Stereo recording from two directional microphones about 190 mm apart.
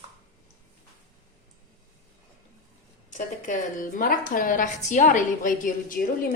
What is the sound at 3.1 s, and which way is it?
A woman's voice, 40° left (ahead or behind).